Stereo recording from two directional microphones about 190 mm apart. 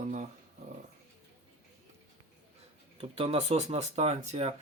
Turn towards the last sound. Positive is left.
turn(degrees=-35)  # may be behind; listen again after turning